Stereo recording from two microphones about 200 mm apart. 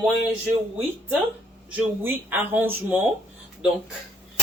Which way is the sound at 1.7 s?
10° right (ahead or behind).